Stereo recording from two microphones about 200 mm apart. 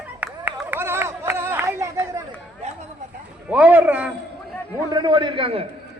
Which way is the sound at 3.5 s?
5° right (ahead or behind).